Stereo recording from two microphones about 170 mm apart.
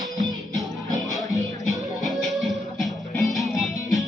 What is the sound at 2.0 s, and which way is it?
Music, centre (ahead or behind).